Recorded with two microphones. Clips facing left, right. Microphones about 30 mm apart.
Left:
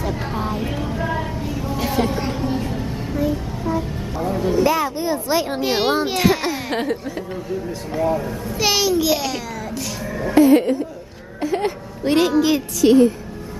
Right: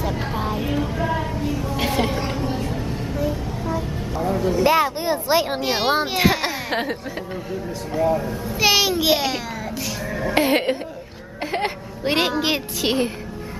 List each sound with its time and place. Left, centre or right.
0.0 s a sound: centre
4.6 s speech: right
5.6 s a child's voice: centre
7.9 s a child's voice: centre
8.8 s speech: right
10.3 s music: right
11.4 s a sound: right
12.0 s a woman's voice: right